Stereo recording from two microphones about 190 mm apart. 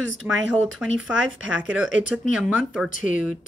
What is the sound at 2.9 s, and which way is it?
Speech, 40° left (ahead or behind).